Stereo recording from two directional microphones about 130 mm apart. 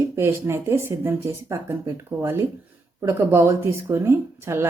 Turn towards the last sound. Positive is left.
turn(degrees=-20)  # may be behind; listen again after turning